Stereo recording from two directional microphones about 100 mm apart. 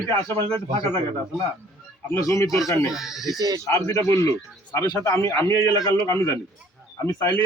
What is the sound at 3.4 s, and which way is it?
Speech, 40° right (ahead or behind).